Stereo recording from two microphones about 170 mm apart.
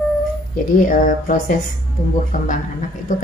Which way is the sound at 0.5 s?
50° left (ahead or behind).